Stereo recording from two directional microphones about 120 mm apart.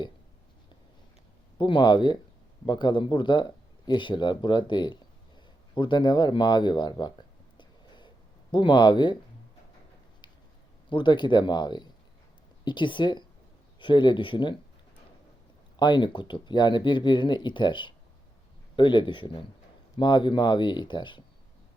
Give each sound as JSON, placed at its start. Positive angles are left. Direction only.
{"t": 1.5, "sound": "speech", "side_deg": 45}
{"t": 7.5, "sound": "a sound", "side_deg": 40}
{"t": 8.5, "sound": "speech", "side_deg": 40}
{"t": 10.8, "sound": "speech", "side_deg": 40}
{"t": 15.8, "sound": "speech", "side_deg": 40}